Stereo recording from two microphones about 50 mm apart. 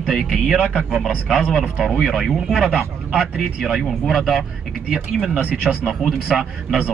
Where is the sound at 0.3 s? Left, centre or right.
Centre.